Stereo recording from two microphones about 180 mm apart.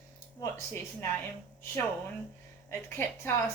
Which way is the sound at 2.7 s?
15° left (ahead or behind).